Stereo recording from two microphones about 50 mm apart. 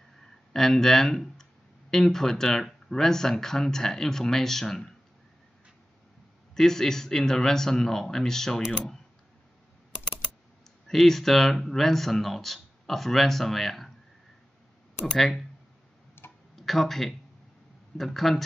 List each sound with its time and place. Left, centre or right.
0.5 s speech: centre
6.5 s speech: centre
10.9 s speech: centre
15.1 s speech: centre
16.2 s tick-tock: left
16.5 s speech: centre